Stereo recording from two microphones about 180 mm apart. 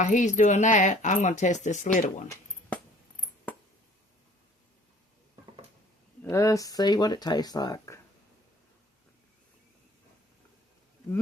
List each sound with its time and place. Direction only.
0.0 s speech: 40° left (ahead or behind)
6.3 s speech: 15° left (ahead or behind)